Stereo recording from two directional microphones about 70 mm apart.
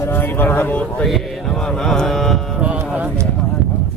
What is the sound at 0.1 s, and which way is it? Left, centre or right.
Speech, left.